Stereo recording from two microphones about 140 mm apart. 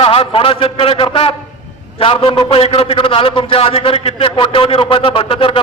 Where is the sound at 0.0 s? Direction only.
40° left (ahead or behind).